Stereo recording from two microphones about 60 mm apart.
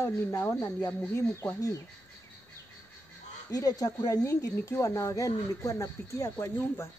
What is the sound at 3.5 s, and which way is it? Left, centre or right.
Speech, left.